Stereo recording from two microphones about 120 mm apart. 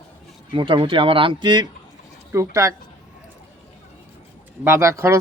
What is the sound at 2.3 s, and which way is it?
Speech, 25° right (ahead or behind).